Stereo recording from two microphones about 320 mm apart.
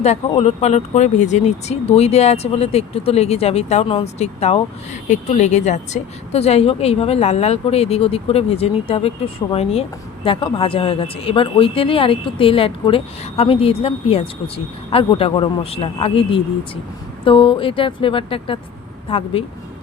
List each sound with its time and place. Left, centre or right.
0.0 s a woman's voice: centre